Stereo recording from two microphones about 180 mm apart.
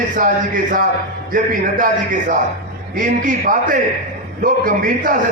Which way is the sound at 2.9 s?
45° right (ahead or behind).